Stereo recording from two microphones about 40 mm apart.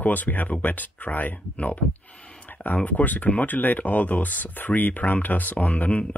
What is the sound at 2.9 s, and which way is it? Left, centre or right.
Speech, left.